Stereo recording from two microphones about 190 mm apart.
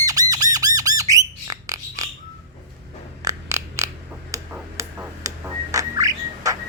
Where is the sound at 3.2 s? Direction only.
15° right (ahead or behind).